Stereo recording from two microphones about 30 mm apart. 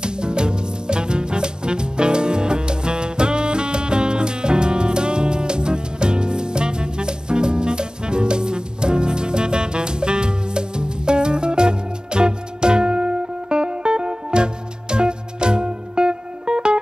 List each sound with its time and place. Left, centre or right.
0.0 s music: right